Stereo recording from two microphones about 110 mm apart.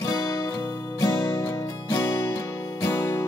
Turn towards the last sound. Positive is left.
turn(degrees=25)  # may be behind; listen again after turning